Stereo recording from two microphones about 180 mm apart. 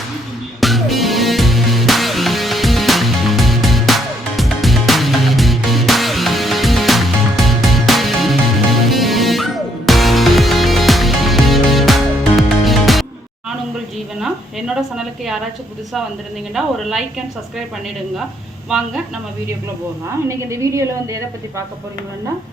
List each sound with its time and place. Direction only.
0.6 s music: centre (ahead or behind)
14.8 s a woman's voice: centre (ahead or behind)
16.6 s a woman's voice: centre (ahead or behind)
20.2 s a woman's voice: 15° right (ahead or behind)